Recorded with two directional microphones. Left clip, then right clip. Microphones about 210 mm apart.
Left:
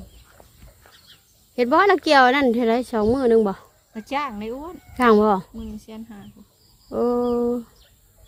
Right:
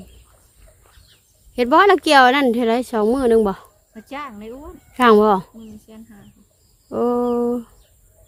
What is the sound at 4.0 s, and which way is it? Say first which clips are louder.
Child singing: left 5 dB; 20° left (ahead or behind).